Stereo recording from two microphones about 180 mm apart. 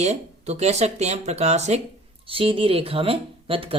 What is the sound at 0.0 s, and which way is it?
Speech, 40° right (ahead or behind).